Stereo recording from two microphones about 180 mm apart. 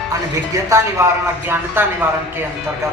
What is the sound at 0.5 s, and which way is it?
Speech, 15° right (ahead or behind).